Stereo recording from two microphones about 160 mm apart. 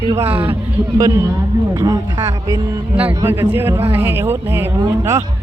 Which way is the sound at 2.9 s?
10° right (ahead or behind).